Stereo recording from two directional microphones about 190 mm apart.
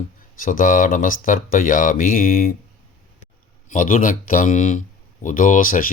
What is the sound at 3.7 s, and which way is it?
Speech, 45° left (ahead or behind).